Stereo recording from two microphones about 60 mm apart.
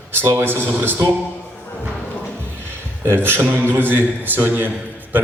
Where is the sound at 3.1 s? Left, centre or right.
Right.